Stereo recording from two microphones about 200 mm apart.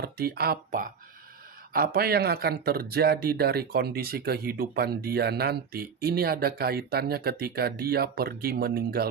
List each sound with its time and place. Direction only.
0.0 s speech: 50° right (ahead or behind)